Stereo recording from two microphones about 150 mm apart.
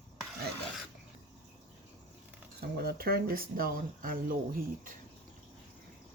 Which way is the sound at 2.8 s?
90° right.